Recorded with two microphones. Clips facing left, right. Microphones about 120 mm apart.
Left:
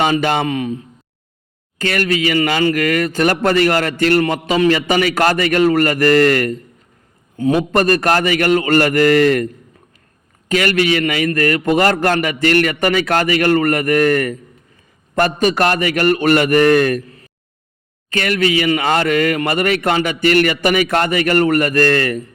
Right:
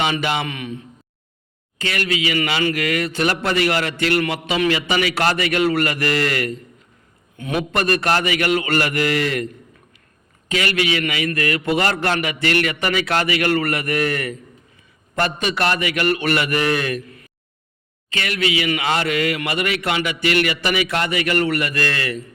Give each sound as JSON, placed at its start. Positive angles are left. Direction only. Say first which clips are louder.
{"t": 0.0, "sound": "a man's voice", "louder": "left 6 dB", "side_deg": 45}
{"t": 1.8, "sound": "speech", "louder": "left 6 dB", "side_deg": 45}
{"t": 7.3, "sound": "speech", "louder": "left 7 dB", "side_deg": 35}
{"t": 10.5, "sound": "speech", "louder": "left 6 dB", "side_deg": 45}